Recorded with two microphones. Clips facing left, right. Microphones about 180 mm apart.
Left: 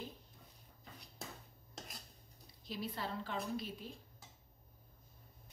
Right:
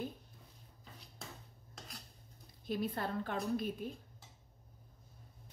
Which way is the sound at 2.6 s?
50° right (ahead or behind).